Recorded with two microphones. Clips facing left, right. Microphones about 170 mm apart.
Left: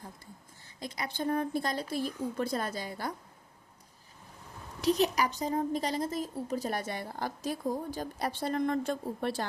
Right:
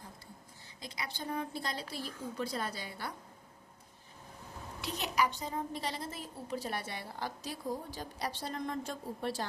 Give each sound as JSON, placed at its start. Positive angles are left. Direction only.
{"t": 0.8, "sound": "a woman's voice", "side_deg": 50}
{"t": 4.8, "sound": "a woman's voice", "side_deg": 40}